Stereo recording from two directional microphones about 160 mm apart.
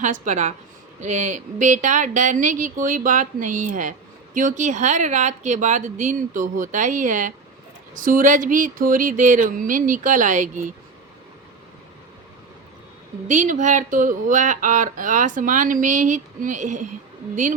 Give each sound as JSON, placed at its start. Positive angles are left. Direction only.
{"t": 0.0, "sound": "speech", "side_deg": -50}
{"t": 8.0, "sound": "a sound", "side_deg": -55}
{"t": 13.2, "sound": "speech", "side_deg": -50}